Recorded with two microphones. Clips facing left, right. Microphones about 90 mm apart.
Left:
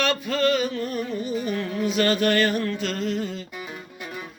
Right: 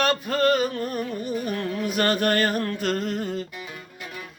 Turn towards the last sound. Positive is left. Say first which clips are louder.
# right 1 dB
turn(degrees=-55)  # may be behind; listen again after turning